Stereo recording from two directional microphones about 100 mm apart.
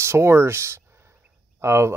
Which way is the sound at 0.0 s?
25° right (ahead or behind).